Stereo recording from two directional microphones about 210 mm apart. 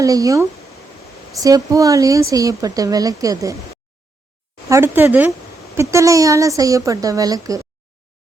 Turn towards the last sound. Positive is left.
turn(degrees=-15)  # may be behind; listen again after turning